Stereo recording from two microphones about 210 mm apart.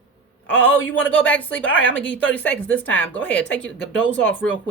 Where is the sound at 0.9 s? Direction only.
5° left (ahead or behind).